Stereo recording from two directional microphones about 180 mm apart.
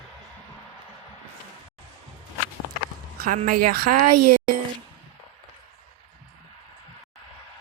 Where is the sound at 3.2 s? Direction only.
50° right (ahead or behind).